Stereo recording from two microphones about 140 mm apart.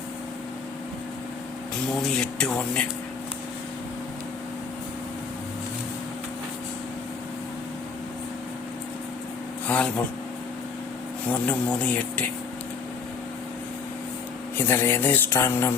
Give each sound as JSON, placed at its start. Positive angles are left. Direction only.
{"t": 2.0, "sound": "speech", "side_deg": 5}
{"t": 9.6, "sound": "a sound", "side_deg": 10}
{"t": 11.3, "sound": "speech", "side_deg": 10}
{"t": 14.7, "sound": "speech", "side_deg": 15}